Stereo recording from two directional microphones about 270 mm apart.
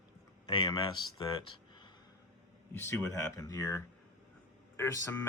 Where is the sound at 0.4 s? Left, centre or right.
Centre.